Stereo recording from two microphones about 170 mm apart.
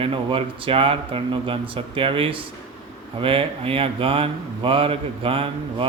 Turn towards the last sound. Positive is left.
turn(degrees=-30)  # may be behind; listen again after turning